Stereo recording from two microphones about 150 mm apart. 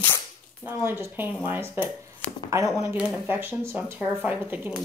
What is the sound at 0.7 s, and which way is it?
Speech, 15° right (ahead or behind).